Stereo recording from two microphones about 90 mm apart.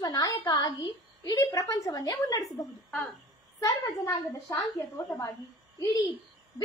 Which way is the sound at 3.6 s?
40° left (ahead or behind).